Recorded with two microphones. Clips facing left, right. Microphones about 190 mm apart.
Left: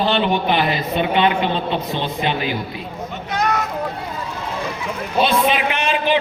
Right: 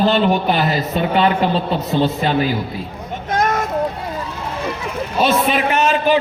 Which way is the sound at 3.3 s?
45° right (ahead or behind).